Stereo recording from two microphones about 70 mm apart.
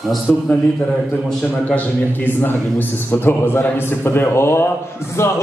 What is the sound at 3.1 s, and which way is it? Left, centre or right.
A man's voice, left.